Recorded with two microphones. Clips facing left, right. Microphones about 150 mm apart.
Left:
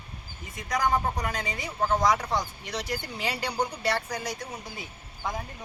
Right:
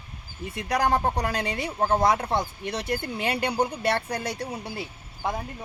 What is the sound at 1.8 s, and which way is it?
Speech, 30° right (ahead or behind).